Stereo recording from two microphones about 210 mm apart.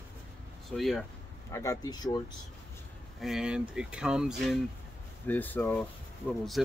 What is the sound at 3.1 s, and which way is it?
Speech, centre (ahead or behind).